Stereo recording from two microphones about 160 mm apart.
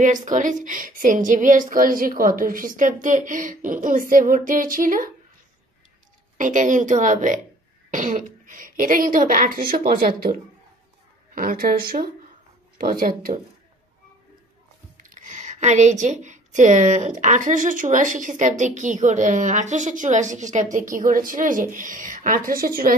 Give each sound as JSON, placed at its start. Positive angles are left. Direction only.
{"t": 0.0, "sound": "a woman's voice", "side_deg": -50}
{"t": 6.3, "sound": "a woman's voice", "side_deg": -55}
{"t": 15.0, "sound": "a woman's voice", "side_deg": -50}